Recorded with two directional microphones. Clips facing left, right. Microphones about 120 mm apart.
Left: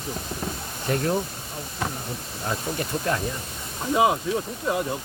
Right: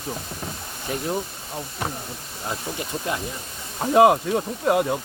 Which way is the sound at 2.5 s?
15° right (ahead or behind).